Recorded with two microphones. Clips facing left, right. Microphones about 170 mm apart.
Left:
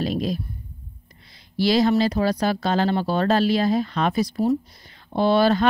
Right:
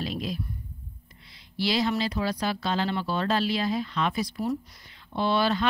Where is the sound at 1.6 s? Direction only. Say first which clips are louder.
Left 8 dB; 40° left (ahead or behind).